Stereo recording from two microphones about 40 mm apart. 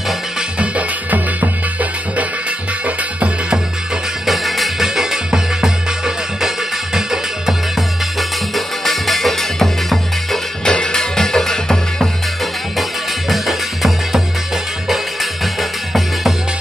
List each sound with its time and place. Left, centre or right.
0.6 s music: right
4.3 s music: centre
10.6 s music: centre
13.3 s music: centre